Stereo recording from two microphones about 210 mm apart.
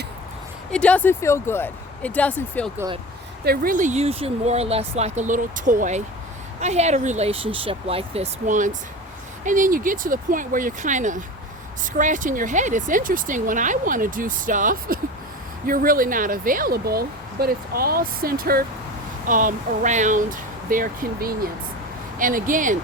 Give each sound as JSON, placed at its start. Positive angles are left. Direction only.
{"t": 0.7, "sound": "speech", "side_deg": 5}
{"t": 3.4, "sound": "speech", "side_deg": -45}